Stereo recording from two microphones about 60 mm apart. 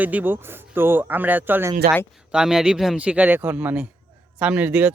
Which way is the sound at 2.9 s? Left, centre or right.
Centre.